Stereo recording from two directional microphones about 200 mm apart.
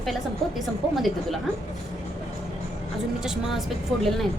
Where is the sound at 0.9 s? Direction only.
Centre (ahead or behind).